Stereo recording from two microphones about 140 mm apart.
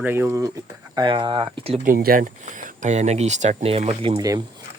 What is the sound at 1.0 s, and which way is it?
Speech, 35° right (ahead or behind).